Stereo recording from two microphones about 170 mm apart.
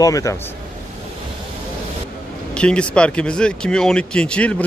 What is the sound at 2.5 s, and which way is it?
A man's voice, 5° left (ahead or behind).